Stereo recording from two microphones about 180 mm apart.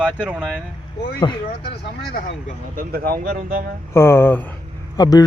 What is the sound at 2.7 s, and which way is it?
Speech, 50° right (ahead or behind).